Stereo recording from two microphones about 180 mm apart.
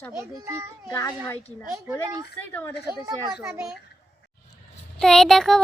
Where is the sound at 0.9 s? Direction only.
20° left (ahead or behind).